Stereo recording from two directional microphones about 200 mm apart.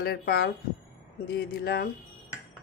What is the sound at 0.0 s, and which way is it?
Speech, 50° left (ahead or behind).